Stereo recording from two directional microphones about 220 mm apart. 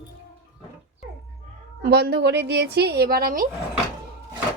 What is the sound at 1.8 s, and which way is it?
A woman's voice, 45° right (ahead or behind).